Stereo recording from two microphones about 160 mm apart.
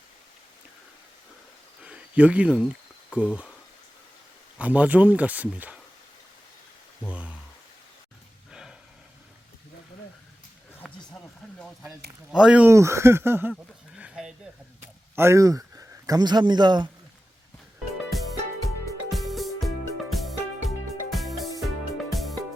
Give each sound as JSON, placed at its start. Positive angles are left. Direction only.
{"t": 1.8, "sound": "cricket", "side_deg": -5}
{"t": 3.2, "sound": "speech", "side_deg": -5}
{"t": 4.5, "sound": "speech", "side_deg": -10}
{"t": 7.1, "sound": "speech", "side_deg": -10}
{"t": 8.4, "sound": "a sound", "side_deg": -5}
{"t": 10.8, "sound": "run", "side_deg": 0}
{"t": 12.3, "sound": "speech", "side_deg": -5}
{"t": 12.7, "sound": "speech", "side_deg": -20}
{"t": 13.9, "sound": "a sound", "side_deg": -5}
{"t": 15.1, "sound": "a man's voice", "side_deg": -15}
{"t": 18.1, "sound": "music", "side_deg": 0}